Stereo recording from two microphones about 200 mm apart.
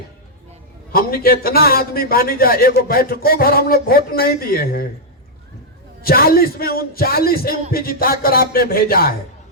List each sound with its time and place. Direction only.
0.9 s a man's voice: 45° left (ahead or behind)
6.0 s a man's voice: 50° left (ahead or behind)